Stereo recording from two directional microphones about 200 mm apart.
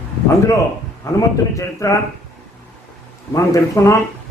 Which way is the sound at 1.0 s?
15° left (ahead or behind).